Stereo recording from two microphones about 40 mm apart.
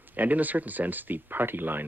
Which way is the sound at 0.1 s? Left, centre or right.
Right.